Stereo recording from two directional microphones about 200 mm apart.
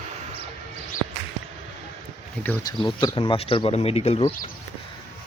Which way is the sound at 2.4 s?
20° left (ahead or behind).